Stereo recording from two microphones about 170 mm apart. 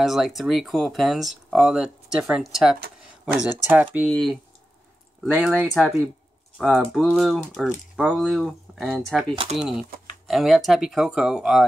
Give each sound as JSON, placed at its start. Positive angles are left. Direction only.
{"t": 0.0, "sound": "speech", "side_deg": 0}
{"t": 9.3, "sound": "speech", "side_deg": -30}
{"t": 9.6, "sound": "speech", "side_deg": -5}